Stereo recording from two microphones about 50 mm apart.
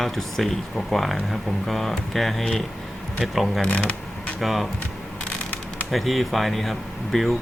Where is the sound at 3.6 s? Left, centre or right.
Left.